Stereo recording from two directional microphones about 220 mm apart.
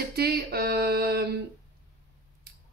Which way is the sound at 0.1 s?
45° right (ahead or behind).